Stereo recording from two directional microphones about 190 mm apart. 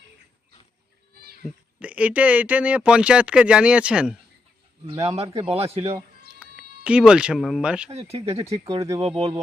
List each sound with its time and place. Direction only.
1.4 s speech: centre (ahead or behind)
5.0 s a man's voice: 30° right (ahead or behind)
6.4 s speech: 5° right (ahead or behind)
7.9 s a man's voice: 30° right (ahead or behind)
8.6 s speech: 15° right (ahead or behind)
9.0 s a man's voice: 30° right (ahead or behind)